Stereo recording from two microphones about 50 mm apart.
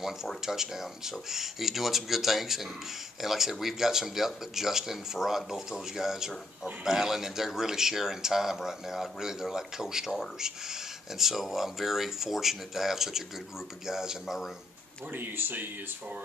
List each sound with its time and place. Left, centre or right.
0.5 s speech: centre
15.1 s speech: right